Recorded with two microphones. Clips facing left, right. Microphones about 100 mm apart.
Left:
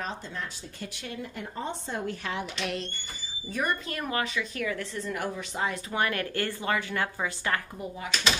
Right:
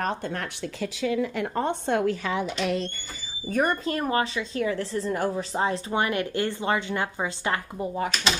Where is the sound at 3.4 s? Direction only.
45° right (ahead or behind).